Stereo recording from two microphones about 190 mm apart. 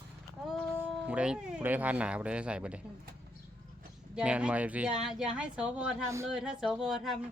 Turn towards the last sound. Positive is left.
turn(degrees=0)  # may be behind; listen again after turning